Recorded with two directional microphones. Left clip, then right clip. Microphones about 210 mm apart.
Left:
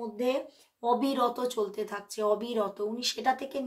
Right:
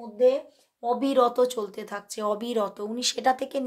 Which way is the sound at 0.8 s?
25° right (ahead or behind).